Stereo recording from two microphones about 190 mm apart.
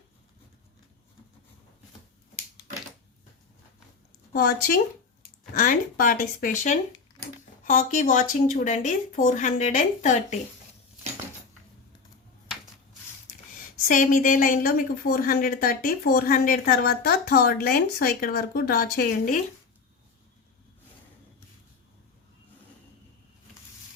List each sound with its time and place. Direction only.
4.3 s a woman's voice: 50° left (ahead or behind)
13.8 s a woman's voice: 45° left (ahead or behind)